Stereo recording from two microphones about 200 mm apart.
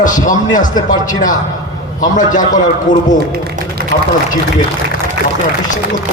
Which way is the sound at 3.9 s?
45° left (ahead or behind).